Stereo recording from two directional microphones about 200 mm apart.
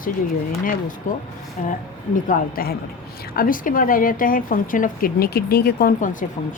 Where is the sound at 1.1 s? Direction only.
40° left (ahead or behind).